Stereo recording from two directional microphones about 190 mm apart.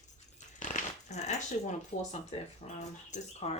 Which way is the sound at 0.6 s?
40° left (ahead or behind).